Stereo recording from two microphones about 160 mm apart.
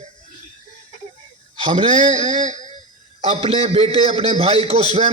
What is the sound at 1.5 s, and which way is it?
Speech, 30° right (ahead or behind).